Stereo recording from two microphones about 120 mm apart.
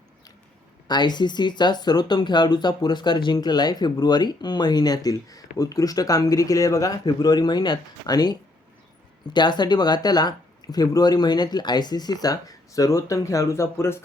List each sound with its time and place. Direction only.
0.9 s speech: 35° left (ahead or behind); by 14.0 s 20° left (ahead or behind)